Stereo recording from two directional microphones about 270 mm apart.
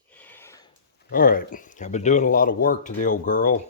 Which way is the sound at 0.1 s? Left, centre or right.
Centre.